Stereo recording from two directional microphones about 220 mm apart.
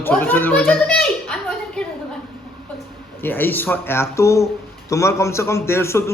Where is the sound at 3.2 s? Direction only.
10° left (ahead or behind).